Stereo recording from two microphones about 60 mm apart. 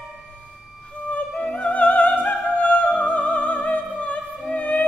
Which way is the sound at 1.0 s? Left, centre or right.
Left.